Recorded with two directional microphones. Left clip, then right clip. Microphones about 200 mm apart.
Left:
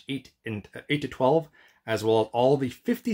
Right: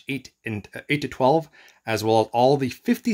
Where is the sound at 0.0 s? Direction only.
30° right (ahead or behind).